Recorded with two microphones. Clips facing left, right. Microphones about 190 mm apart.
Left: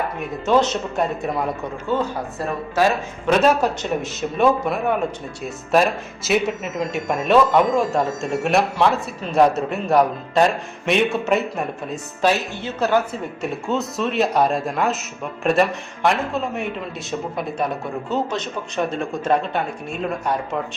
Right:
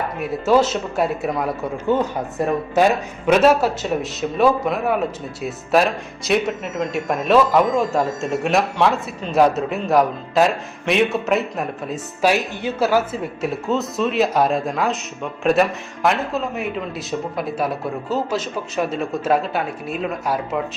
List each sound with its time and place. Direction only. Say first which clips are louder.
0.2 s speech: right 2 dB; 5° right (ahead or behind)
1.9 s speech: right 3 dB; 20° right (ahead or behind)
3.2 s speech: right 2 dB; 5° right (ahead or behind)